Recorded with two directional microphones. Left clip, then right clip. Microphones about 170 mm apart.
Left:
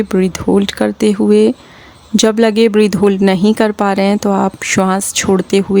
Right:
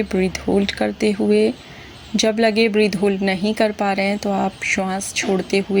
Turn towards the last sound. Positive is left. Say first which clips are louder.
# left 6 dB
turn(degrees=45)  # may be behind; listen again after turning